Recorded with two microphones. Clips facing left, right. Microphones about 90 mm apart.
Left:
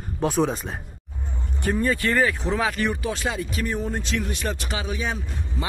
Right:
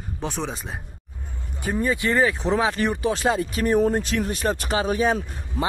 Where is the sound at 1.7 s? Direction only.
15° right (ahead or behind).